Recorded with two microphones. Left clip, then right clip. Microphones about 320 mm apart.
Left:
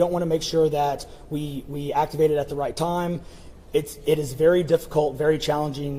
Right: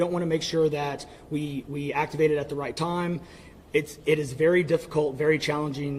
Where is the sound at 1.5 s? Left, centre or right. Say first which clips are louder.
Left 6 dB; centre.